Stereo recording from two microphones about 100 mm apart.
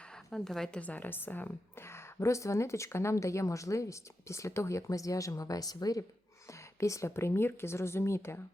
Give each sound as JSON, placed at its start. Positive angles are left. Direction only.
{"t": 0.3, "sound": "speech", "side_deg": 5}
{"t": 2.1, "sound": "speech", "side_deg": 30}